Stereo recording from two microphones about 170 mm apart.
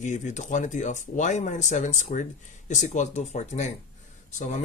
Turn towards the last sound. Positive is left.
turn(degrees=45)  # may be behind; listen again after turning